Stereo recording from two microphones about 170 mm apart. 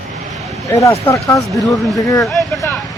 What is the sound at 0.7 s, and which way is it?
Speech, 15° left (ahead or behind).